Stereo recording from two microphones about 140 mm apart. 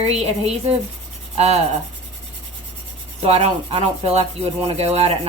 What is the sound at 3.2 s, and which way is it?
Rub, 45° right (ahead or behind).